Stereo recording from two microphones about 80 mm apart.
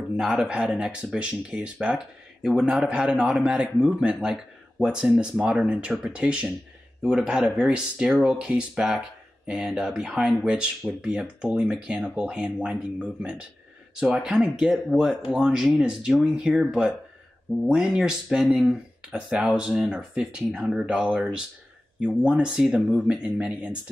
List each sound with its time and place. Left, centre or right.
0.2 s speech: centre
0.5 s a man's voice: centre